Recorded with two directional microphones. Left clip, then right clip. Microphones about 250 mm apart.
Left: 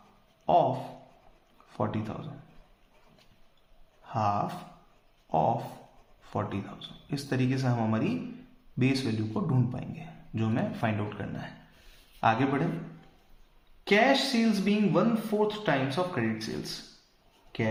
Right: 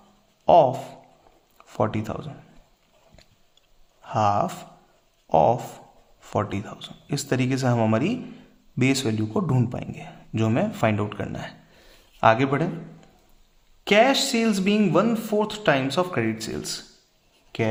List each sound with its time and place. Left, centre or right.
0.4 s speech: right
4.0 s speech: right
13.8 s speech: right